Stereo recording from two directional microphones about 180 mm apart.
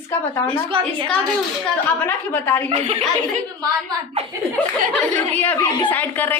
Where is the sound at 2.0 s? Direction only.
10° left (ahead or behind).